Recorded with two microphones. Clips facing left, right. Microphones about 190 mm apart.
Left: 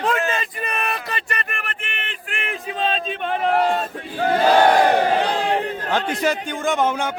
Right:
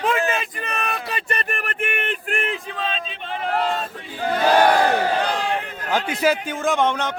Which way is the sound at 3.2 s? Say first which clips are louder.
Left 4 dB; 55° left (ahead or behind).